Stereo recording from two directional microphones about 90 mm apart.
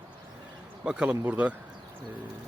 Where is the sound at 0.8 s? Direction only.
10° right (ahead or behind).